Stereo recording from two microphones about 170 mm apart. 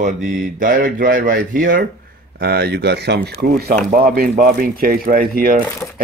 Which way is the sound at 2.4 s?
65° right (ahead or behind).